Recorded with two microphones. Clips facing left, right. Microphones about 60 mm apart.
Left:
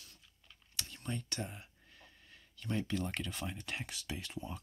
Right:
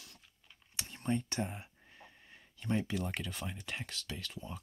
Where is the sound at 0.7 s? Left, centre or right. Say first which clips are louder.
Right 7 dB; right; by 4.5 s centre.